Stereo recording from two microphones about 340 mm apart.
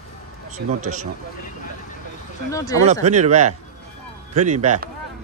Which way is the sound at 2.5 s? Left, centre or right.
Centre.